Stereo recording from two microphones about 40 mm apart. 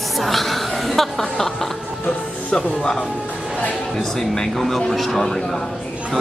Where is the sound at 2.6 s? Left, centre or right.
Centre.